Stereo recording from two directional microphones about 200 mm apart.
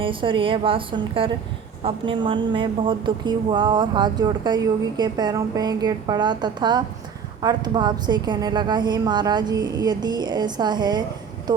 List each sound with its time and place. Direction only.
0.0 s a woman's voice: 25° right (ahead or behind)